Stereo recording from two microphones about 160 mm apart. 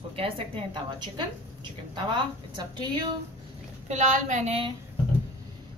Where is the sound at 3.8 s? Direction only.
50° right (ahead or behind).